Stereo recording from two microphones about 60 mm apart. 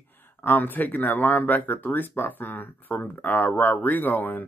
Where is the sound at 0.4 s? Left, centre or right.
Left.